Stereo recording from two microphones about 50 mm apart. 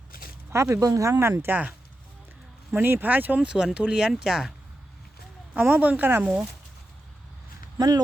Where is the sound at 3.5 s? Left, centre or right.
Right.